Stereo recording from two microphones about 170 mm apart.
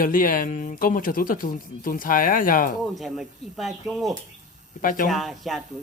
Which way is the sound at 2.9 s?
Centre (ahead or behind).